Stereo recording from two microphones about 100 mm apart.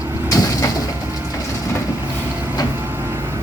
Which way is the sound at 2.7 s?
20° right (ahead or behind).